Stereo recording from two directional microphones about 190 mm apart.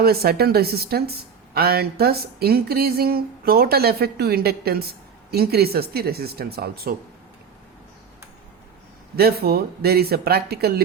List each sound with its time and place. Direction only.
0.0 s speech: 55° right (ahead or behind)
9.1 s speech: 55° right (ahead or behind)